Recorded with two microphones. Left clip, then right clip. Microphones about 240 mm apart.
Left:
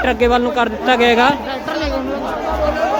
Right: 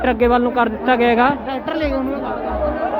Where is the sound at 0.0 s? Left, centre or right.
Centre.